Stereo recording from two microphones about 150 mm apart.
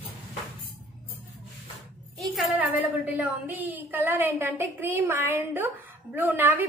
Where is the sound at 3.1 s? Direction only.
10° right (ahead or behind).